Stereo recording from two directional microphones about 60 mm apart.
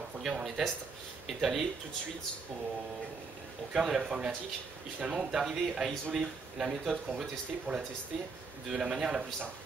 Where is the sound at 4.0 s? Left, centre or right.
Centre.